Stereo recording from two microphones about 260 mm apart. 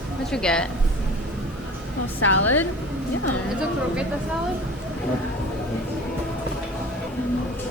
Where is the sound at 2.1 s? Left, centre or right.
Left.